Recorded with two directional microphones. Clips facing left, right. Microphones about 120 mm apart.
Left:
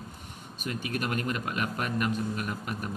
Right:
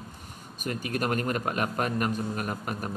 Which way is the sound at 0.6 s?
45° right (ahead or behind).